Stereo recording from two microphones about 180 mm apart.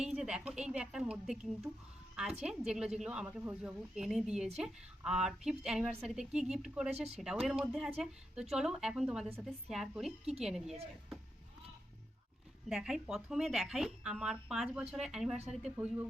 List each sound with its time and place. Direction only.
0.0 s a woman's voice: 5° right (ahead or behind)
12.6 s a woman's voice: 5° right (ahead or behind)
15.4 s speech: 40° right (ahead or behind)